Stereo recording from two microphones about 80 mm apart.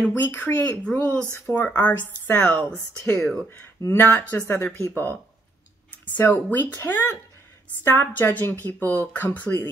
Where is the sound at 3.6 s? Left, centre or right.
Left.